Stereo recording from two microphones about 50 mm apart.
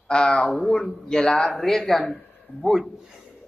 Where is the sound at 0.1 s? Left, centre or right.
Centre.